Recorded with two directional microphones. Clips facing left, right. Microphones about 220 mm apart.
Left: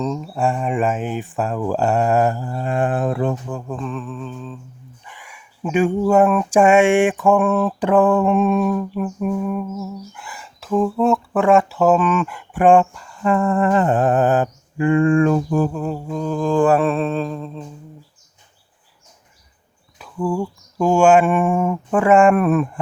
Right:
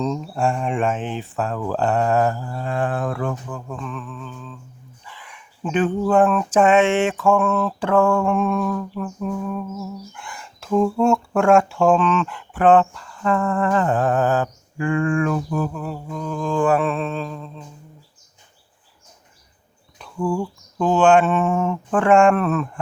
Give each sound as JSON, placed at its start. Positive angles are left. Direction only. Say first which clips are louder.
{"t": 0.0, "sound": "speech", "louder": "left 1 dB", "side_deg": 5}
{"t": 3.7, "sound": "a sound", "louder": "left 5 dB", "side_deg": 30}
{"t": 5.0, "sound": "speech", "louder": "right 2 dB", "side_deg": 10}
{"t": 20.0, "sound": "speech", "louder": "left 1 dB", "side_deg": 5}